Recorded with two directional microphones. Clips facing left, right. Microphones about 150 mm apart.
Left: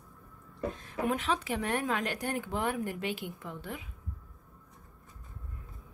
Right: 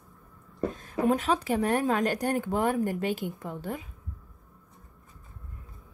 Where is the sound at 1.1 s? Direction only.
40° right (ahead or behind).